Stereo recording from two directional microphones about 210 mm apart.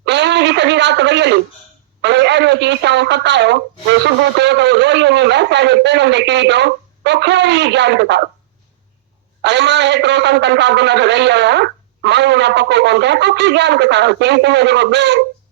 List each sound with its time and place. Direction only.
0.0 s a sound: 55° right (ahead or behind)
2.0 s a man's voice: 55° right (ahead or behind)
9.4 s a man's voice: 55° right (ahead or behind)